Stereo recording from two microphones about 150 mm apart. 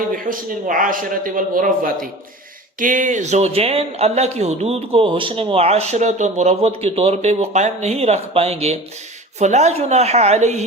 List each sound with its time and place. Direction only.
0.1 s a man's voice: 65° right (ahead or behind); by 10.6 s 50° right (ahead or behind)